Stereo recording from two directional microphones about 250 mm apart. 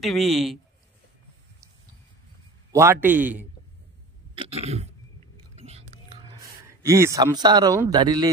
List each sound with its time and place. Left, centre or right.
0.0 s a man's voice: centre
2.7 s a man's voice: centre
4.4 s a sound: right
5.6 s whispering: right
6.8 s a man's voice: centre